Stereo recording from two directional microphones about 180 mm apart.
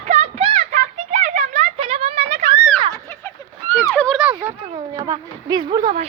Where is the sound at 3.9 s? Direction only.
10° left (ahead or behind).